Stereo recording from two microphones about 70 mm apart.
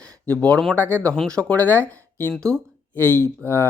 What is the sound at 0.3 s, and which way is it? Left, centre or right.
Speech, centre.